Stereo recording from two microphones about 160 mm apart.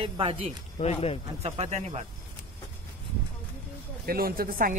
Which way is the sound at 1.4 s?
45° right (ahead or behind).